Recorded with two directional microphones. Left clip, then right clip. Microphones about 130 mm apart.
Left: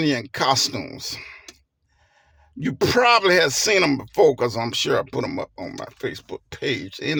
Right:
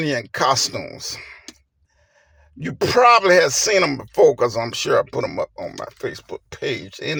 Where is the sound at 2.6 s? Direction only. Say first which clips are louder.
Right 4 dB; 25° left (ahead or behind).